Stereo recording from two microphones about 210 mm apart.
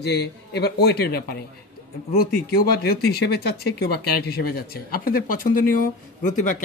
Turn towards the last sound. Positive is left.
turn(degrees=35)  # may be behind; listen again after turning